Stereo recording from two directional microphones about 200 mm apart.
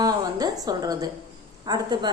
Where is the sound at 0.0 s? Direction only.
20° right (ahead or behind).